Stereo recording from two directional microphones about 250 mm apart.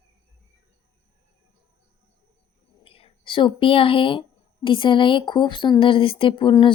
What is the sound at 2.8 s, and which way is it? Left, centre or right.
Speech, left.